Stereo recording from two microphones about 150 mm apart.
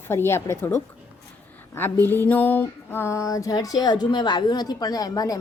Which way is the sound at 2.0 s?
15° left (ahead or behind).